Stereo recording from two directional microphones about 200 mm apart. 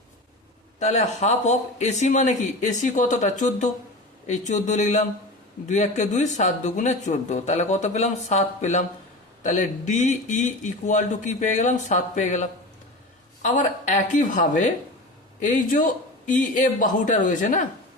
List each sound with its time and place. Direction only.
0.8 s speech: 35° left (ahead or behind)